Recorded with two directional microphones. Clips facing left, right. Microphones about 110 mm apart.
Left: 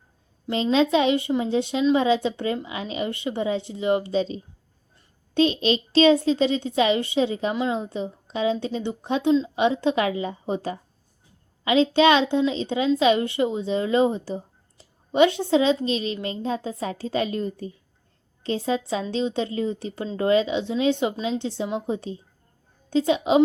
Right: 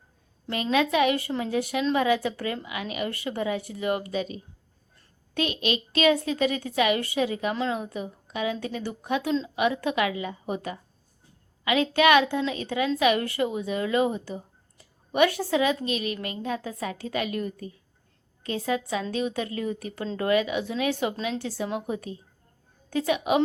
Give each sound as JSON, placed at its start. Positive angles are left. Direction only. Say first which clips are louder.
{"t": 0.5, "sound": "speech", "louder": "left 4 dB", "side_deg": 25}